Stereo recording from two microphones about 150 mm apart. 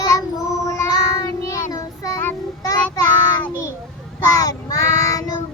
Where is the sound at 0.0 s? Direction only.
25° left (ahead or behind).